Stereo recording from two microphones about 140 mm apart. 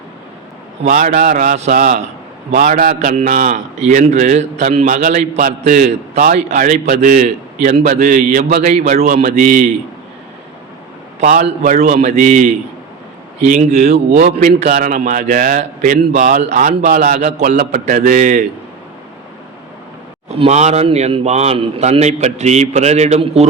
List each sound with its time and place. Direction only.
0.9 s a man's voice: 70° right (ahead or behind)
3.8 s a man's voice: 55° right (ahead or behind)
4.9 s a man's voice: 60° right (ahead or behind)
5.4 s a man's voice: 80° right
6.3 s a man's voice: 65° right (ahead or behind)
11.2 s a man's voice: 65° right (ahead or behind)
14.3 s a man's voice: 70° right (ahead or behind)
16.4 s a man's voice: 60° right (ahead or behind); by 17.2 s 80° right
17.2 s a man's voice: 55° right (ahead or behind)
20.2 s a man's voice: 55° right (ahead or behind)